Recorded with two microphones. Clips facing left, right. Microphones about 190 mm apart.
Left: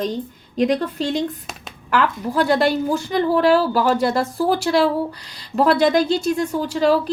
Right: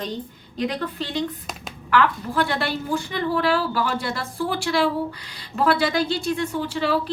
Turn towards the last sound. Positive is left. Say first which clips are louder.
# left 6 dB
turn(degrees=40)  # may be behind; listen again after turning